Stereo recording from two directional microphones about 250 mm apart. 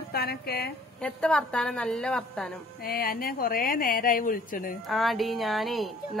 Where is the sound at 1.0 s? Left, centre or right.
Centre.